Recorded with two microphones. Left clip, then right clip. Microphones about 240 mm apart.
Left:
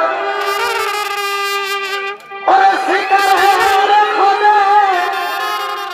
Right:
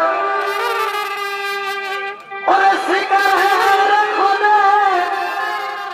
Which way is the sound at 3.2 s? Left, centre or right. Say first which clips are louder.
Left 3 dB; left.